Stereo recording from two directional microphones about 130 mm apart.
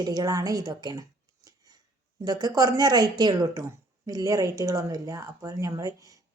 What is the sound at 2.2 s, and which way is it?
A woman's voice, 30° right (ahead or behind).